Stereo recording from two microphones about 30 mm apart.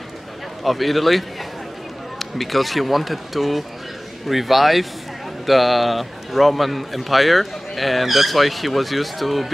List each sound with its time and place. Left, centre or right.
0.7 s a man's voice: centre